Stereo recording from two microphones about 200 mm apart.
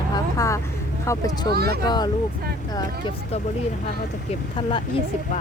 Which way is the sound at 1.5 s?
50° right (ahead or behind).